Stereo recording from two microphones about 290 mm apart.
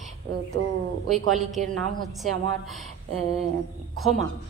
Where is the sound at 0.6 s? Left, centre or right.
Right.